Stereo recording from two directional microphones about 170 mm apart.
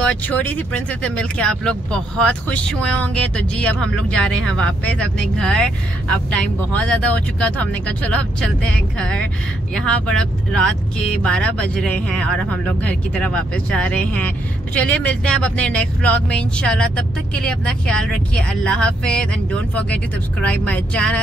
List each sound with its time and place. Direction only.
0.0 s speech: 10° left (ahead or behind)